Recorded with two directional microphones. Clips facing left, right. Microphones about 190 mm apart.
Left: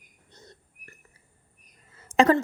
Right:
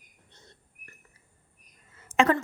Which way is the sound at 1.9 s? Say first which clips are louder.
Left 3 dB; 35° left (ahead or behind).